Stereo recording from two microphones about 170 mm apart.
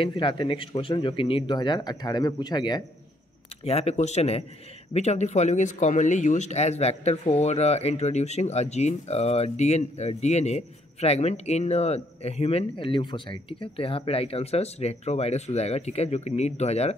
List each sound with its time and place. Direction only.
0.0 s speech: 30° left (ahead or behind)
3.6 s speech: 35° left (ahead or behind)